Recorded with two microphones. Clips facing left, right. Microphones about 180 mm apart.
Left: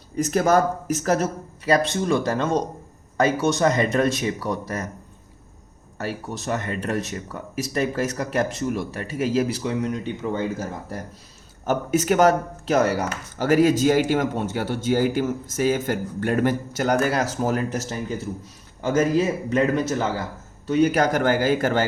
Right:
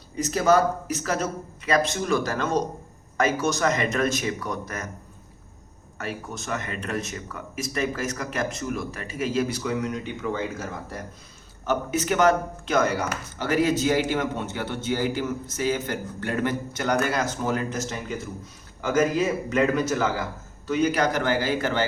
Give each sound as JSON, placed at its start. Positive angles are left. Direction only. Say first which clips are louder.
{"t": 0.2, "sound": "speech", "louder": "left 1 dB", "side_deg": 50}
{"t": 6.0, "sound": "speech", "louder": "left 3 dB", "side_deg": 35}
{"t": 11.6, "sound": "a man's voice", "louder": "left 3 dB", "side_deg": 45}